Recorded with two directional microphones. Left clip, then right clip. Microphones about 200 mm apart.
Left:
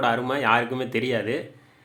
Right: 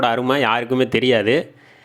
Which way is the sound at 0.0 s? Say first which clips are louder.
Right 5 dB; 40° right (ahead or behind).